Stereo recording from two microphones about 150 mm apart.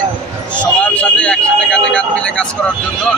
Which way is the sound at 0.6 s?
10° left (ahead or behind).